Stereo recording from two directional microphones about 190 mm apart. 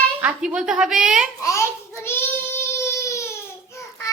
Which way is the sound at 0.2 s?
5° right (ahead or behind).